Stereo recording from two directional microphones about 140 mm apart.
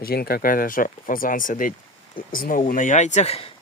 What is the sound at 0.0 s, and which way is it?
Speech, 90° left.